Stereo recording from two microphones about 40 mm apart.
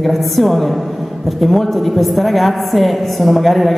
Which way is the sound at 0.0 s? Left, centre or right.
Centre.